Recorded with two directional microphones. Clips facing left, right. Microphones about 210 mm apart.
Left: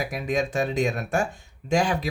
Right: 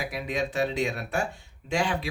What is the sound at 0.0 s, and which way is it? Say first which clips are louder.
Speech: left 4 dB; 45° left (ahead or behind).